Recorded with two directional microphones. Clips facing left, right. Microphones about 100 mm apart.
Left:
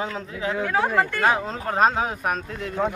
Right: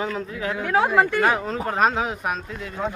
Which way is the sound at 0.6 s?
15° right (ahead or behind).